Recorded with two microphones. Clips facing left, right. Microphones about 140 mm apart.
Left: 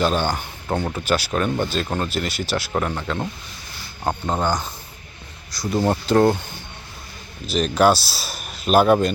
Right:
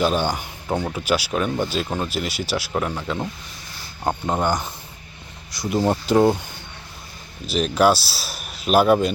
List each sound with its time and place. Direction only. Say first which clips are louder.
0.0 s speech: even; 10° right (ahead or behind)
4.4 s speech: even; 20° right (ahead or behind)
5.6 s speech: even; 10° right (ahead or behind)
7.4 s speech: left 1 dB; 5° right (ahead or behind)